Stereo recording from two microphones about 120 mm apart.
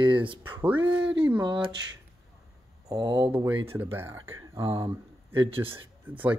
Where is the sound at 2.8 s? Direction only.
35° right (ahead or behind).